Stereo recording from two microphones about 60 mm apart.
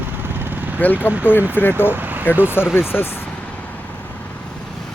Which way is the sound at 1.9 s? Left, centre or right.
Right.